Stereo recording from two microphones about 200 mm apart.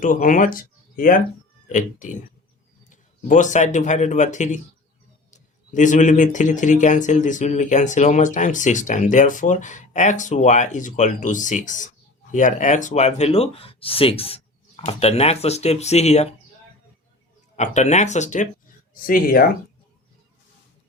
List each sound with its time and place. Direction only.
0.0 s speech: 40° left (ahead or behind)
17.6 s speech: 35° left (ahead or behind)